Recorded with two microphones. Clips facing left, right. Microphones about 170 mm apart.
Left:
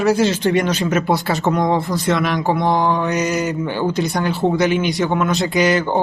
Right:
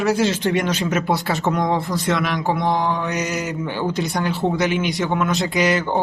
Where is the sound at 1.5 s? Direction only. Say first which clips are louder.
Left 3 dB; centre (ahead or behind).